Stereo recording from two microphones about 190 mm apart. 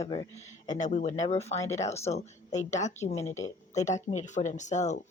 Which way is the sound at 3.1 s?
15° left (ahead or behind).